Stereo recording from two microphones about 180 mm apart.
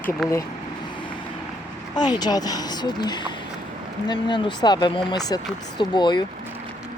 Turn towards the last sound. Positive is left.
turn(degrees=25)  # may be behind; listen again after turning